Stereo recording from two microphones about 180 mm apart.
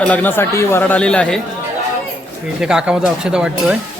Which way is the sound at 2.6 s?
5° right (ahead or behind).